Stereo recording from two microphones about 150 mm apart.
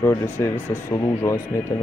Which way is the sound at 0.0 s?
15° left (ahead or behind).